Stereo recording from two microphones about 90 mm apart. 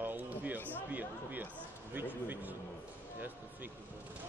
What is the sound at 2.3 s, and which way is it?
Speech, 20° right (ahead or behind).